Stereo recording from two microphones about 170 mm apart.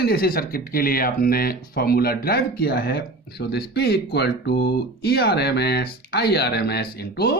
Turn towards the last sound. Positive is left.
turn(degrees=65)  # may be behind; listen again after turning